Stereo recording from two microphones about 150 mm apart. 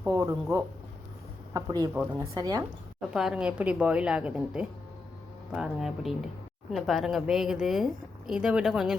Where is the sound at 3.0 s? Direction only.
5° right (ahead or behind).